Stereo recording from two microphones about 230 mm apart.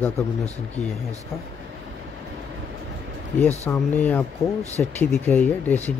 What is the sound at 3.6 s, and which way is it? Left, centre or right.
Speech, centre.